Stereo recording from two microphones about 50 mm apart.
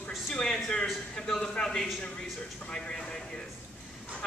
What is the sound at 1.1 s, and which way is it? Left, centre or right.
Speech, centre.